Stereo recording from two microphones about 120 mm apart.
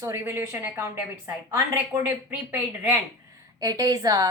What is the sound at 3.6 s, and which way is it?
Speech, 30° right (ahead or behind).